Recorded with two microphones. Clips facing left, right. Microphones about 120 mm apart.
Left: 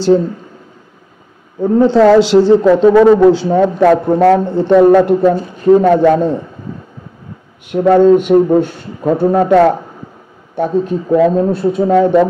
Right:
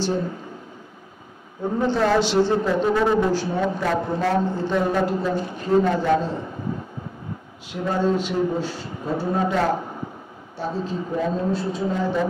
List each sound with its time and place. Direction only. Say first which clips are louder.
1.8 s a man's voice: left 12 dB; 90° left; by 6.3 s 60° left (ahead or behind)
7.7 s a man's voice: left 14 dB; 60° left (ahead or behind)
10.5 s a man's voice: left 12 dB; 60° left (ahead or behind)